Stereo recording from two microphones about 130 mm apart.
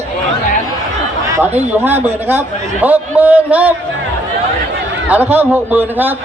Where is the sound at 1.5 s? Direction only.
15° right (ahead or behind).